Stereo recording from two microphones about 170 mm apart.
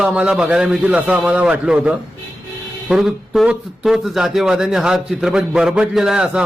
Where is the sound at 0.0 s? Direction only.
5° right (ahead or behind).